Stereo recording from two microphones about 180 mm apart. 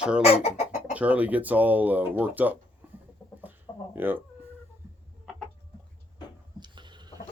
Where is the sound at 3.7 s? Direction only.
20° left (ahead or behind).